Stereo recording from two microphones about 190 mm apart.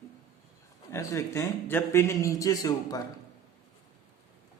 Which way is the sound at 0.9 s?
15° left (ahead or behind).